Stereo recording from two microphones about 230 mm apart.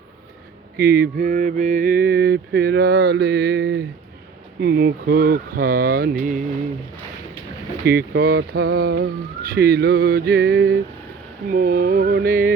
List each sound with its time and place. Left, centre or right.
0.8 s mantra: right
4.6 s speech: right
7.9 s mantra: right
11.5 s speech: right